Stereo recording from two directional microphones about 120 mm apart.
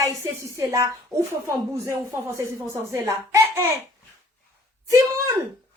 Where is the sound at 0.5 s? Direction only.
25° right (ahead or behind).